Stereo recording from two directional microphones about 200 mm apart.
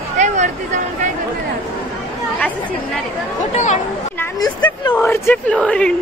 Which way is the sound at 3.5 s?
35° left (ahead or behind).